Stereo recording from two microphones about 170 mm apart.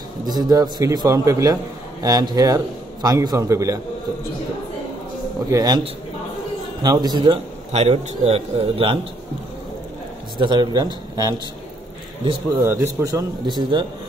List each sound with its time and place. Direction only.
0.3 s a man's voice: 25° right (ahead or behind)
5.5 s a man's voice: 20° right (ahead or behind)
6.8 s a man's voice: 25° right (ahead or behind)
7.7 s a man's voice: 40° right (ahead or behind)
10.3 s a man's voice: 25° right (ahead or behind)
12.6 s a man's voice: 20° right (ahead or behind)